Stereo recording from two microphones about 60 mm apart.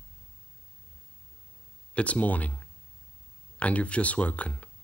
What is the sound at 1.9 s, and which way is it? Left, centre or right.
Speech, left.